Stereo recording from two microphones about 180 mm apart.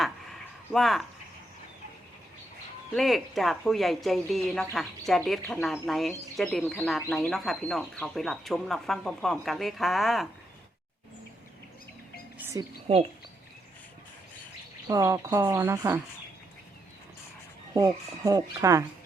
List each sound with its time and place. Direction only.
0.0 s a sound: centre (ahead or behind)
2.9 s speech: centre (ahead or behind)
12.4 s music: 15° right (ahead or behind)
14.8 s speech: 20° right (ahead or behind)
17.7 s speech: 20° right (ahead or behind)